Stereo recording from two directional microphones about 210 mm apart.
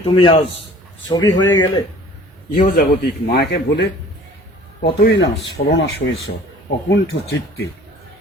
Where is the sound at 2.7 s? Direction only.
50° left (ahead or behind).